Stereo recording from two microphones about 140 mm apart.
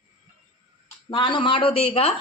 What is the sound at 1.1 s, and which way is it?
Speech, 35° left (ahead or behind).